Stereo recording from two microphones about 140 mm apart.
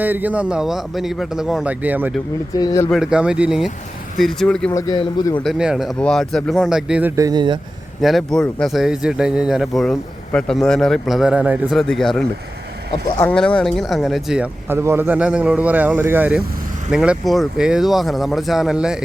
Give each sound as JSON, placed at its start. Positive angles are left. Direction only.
{"t": 0.0, "sound": "speech", "side_deg": -15}
{"t": 2.6, "sound": "speech", "side_deg": 30}
{"t": 2.9, "sound": "speech", "side_deg": -5}
{"t": 4.7, "sound": "speech", "side_deg": 20}
{"t": 4.9, "sound": "a man's voice", "side_deg": 35}
{"t": 5.4, "sound": "speech", "side_deg": 0}
{"t": 7.2, "sound": "speech", "side_deg": -30}
{"t": 8.0, "sound": "speech", "side_deg": 0}
{"t": 11.8, "sound": "speech", "side_deg": 0}
{"t": 13.3, "sound": "speech", "side_deg": 5}